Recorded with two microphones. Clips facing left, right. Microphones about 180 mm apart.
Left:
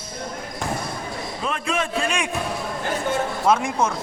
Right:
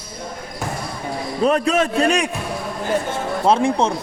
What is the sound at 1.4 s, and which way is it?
Speech, 40° right (ahead or behind).